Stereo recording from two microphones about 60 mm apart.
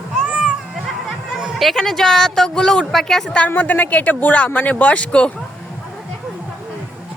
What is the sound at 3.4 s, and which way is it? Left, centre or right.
Speech, left.